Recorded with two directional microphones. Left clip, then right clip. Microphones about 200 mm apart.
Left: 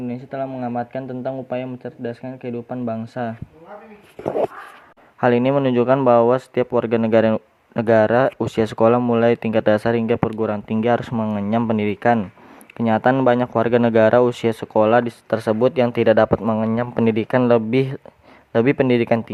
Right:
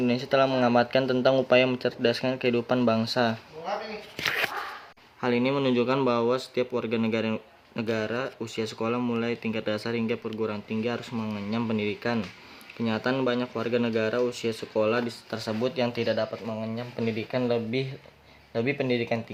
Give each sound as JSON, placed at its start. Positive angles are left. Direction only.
{"t": 0.1, "sound": "speech", "side_deg": 10}
{"t": 5.2, "sound": "speech", "side_deg": 30}
{"t": 6.3, "sound": "speech", "side_deg": 35}
{"t": 9.0, "sound": "speech", "side_deg": 25}
{"t": 9.2, "sound": "speech", "side_deg": 35}
{"t": 11.1, "sound": "speech", "side_deg": 30}